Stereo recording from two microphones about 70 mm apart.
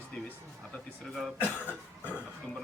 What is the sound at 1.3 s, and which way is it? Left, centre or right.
Cough, left.